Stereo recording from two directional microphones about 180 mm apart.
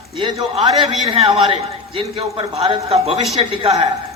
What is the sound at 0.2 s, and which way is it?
A man's voice, 30° right (ahead or behind).